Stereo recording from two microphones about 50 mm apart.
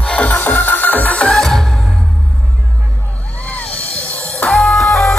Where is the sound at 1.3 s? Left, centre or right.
Centre.